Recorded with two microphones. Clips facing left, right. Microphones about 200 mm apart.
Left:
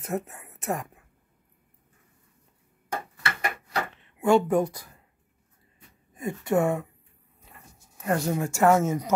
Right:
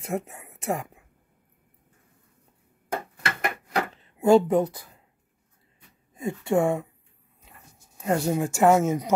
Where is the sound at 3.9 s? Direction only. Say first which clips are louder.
Right 3 dB; 35° right (ahead or behind).